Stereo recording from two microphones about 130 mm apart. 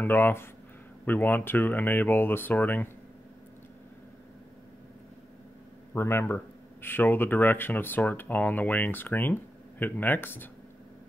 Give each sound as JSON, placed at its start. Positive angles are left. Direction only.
{"t": 0.0, "sound": "speech", "side_deg": 15}
{"t": 5.9, "sound": "speech", "side_deg": 20}